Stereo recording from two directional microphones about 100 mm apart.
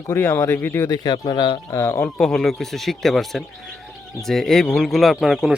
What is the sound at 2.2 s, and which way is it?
Speech, 5° left (ahead or behind).